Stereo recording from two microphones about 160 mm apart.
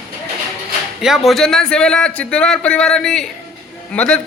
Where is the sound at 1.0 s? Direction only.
Centre (ahead or behind).